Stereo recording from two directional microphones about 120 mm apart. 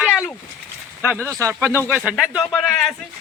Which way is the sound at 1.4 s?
20° right (ahead or behind).